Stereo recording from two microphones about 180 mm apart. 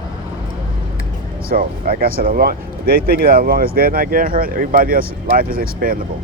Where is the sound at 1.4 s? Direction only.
55° right (ahead or behind).